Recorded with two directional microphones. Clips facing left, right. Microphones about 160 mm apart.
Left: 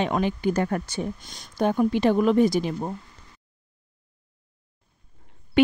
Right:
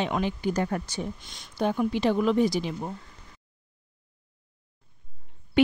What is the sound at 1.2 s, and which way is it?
Speech, 40° left (ahead or behind).